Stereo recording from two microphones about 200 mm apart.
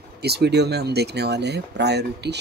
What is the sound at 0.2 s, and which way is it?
Speech, 55° right (ahead or behind).